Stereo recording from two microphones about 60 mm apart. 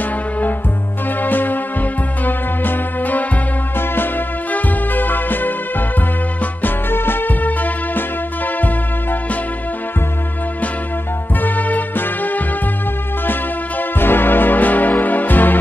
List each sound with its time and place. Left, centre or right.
1.2 s music: left
11.4 s music: left